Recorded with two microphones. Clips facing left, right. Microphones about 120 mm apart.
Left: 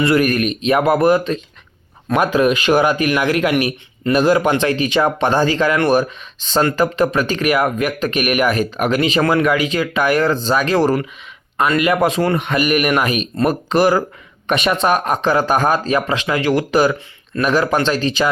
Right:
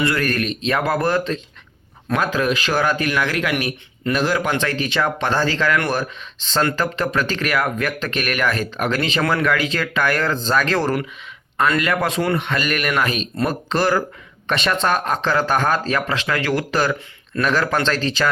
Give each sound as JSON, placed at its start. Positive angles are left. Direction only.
{"t": 0.0, "sound": "speech", "side_deg": 20}
{"t": 12.0, "sound": "speech", "side_deg": 20}